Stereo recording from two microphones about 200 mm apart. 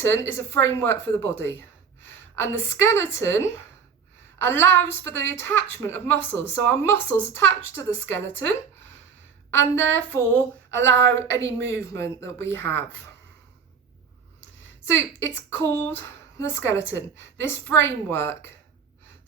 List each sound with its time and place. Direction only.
0.0 s a woman's voice: 10° left (ahead or behind)
10.9 s a woman's voice: 60° right (ahead or behind)
11.3 s a woman's voice: 15° left (ahead or behind)
14.8 s a woman's voice: 15° left (ahead or behind)